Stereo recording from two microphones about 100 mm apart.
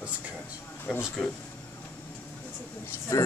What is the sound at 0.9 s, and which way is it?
Speech, 5° right (ahead or behind).